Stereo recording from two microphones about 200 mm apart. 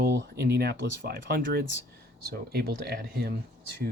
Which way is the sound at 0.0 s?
55° right (ahead or behind).